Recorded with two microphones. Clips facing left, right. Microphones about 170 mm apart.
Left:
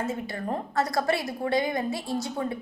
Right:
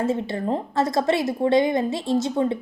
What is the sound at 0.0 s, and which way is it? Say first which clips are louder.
A woman's voice: right 7 dB; 30° right (ahead or behind).